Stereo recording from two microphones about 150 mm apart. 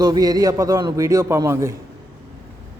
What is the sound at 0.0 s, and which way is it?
A man's voice, 25° right (ahead or behind).